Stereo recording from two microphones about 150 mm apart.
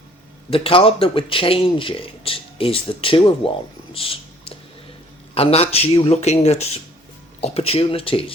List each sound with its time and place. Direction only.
0.5 s a man's voice: 40° left (ahead or behind)
3.9 s a sound: 35° left (ahead or behind)
5.3 s a man's voice: 40° left (ahead or behind)